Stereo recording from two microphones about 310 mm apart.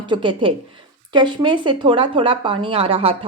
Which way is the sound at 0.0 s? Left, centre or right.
Centre.